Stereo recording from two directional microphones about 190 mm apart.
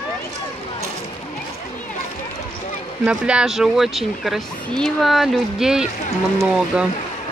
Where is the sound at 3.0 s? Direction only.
5° right (ahead or behind).